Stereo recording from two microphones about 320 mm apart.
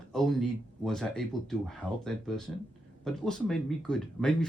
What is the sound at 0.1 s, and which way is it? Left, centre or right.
Speech, centre.